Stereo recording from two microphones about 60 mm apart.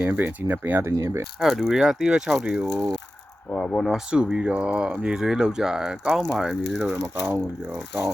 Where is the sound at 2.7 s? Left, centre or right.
Centre.